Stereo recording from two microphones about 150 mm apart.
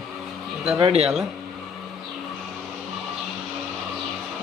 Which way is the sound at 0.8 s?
45° right (ahead or behind).